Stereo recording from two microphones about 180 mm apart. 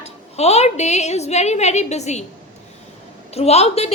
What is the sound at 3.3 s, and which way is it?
Speech, 35° left (ahead or behind).